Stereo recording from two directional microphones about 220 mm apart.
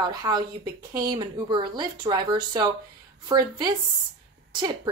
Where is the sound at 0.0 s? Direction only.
20° right (ahead or behind).